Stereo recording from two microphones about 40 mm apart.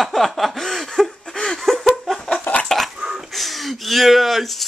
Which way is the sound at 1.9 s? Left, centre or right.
Centre.